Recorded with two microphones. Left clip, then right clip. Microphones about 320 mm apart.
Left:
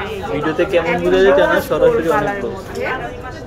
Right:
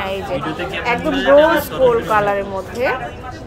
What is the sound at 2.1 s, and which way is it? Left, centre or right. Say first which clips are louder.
Speech: right 1 dB; right.